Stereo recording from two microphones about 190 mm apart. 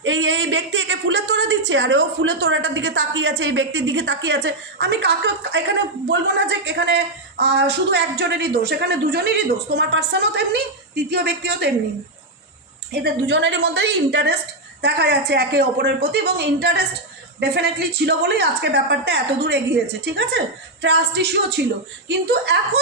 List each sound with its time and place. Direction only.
0.0 s a woman's voice: 80° right; by 11.7 s 60° right (ahead or behind)
12.9 s speech: 60° right (ahead or behind)